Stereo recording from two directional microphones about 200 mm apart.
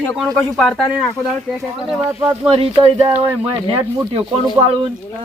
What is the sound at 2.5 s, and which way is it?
Speech, 25° right (ahead or behind).